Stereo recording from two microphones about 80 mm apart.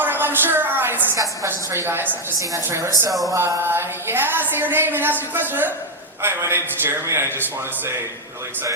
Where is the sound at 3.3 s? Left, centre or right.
Right.